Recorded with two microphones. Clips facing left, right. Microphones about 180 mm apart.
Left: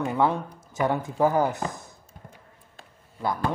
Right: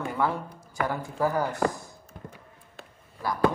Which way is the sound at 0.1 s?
20° left (ahead or behind).